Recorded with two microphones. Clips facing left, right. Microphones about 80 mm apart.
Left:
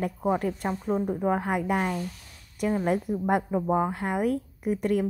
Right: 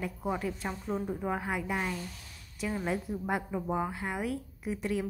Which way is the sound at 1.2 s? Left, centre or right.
Left.